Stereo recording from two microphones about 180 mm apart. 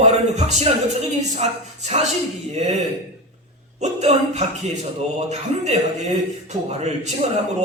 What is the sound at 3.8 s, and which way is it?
Speech, 40° right (ahead or behind).